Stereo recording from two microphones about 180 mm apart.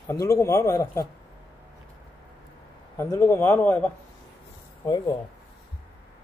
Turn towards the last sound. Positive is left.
turn(degrees=20)  # may be behind; listen again after turning